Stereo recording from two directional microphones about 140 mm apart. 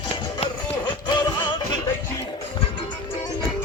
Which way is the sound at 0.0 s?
35° left (ahead or behind).